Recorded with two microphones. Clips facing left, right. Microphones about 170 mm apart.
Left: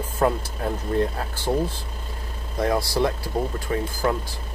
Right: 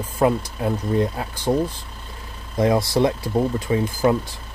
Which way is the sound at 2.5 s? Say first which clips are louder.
Right 4 dB; 20° right (ahead or behind).